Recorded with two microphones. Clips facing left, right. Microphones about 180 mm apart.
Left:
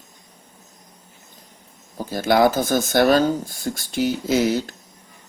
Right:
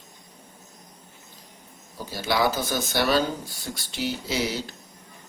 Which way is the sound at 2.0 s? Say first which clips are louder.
Left 7 dB; 50° left (ahead or behind).